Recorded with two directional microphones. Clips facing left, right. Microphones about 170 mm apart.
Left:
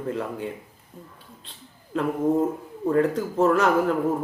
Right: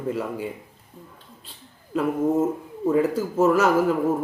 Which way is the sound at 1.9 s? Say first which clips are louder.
Right 1 dB; 5° right (ahead or behind).